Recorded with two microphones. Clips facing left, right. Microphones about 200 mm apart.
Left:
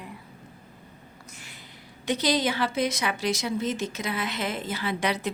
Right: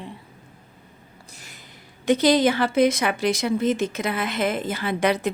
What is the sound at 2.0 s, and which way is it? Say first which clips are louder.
A woman's voice: right 7 dB; 50° right (ahead or behind).